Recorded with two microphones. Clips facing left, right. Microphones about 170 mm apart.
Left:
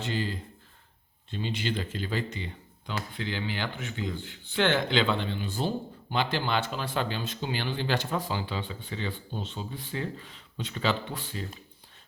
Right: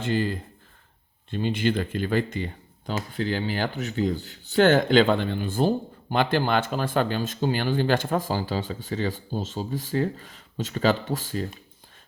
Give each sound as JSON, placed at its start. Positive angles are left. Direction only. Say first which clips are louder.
{"t": 0.0, "sound": "speech", "louder": "right 6 dB", "side_deg": -50}